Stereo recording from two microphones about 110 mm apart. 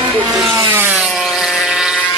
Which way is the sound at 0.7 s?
20° right (ahead or behind).